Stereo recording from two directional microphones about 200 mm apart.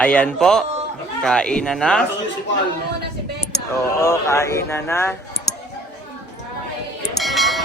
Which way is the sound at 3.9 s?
15° left (ahead or behind).